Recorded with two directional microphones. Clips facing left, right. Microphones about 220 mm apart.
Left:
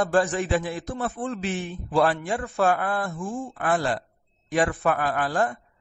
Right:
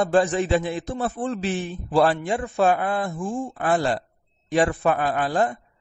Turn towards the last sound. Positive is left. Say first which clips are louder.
# right 2 dB
turn(degrees=-20)  # may be behind; listen again after turning